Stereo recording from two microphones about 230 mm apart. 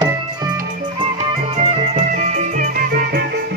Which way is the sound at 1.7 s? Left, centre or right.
Right.